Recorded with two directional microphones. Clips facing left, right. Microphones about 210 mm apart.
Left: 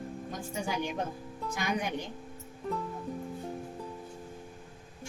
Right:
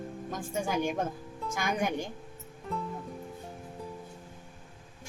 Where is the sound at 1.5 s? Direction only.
50° right (ahead or behind).